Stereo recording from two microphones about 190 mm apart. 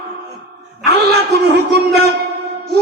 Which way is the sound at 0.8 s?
60° right (ahead or behind).